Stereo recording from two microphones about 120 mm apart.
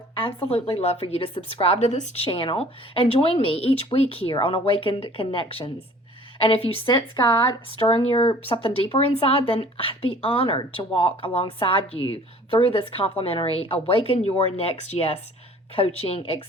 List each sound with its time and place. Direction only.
0.4 s a woman's voice: 50° left (ahead or behind); by 2.2 s 70° left (ahead or behind)
2.2 s speech: 50° left (ahead or behind)
6.8 s speech: 40° left (ahead or behind)